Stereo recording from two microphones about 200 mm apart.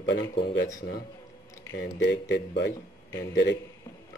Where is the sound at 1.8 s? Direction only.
65° left (ahead or behind).